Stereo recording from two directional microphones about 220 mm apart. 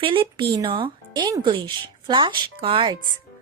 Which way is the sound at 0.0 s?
25° right (ahead or behind).